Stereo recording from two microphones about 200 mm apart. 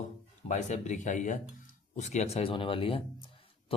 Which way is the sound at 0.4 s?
35° left (ahead or behind).